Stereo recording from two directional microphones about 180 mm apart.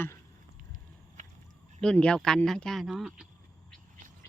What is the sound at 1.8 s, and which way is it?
Speech, 5° left (ahead or behind).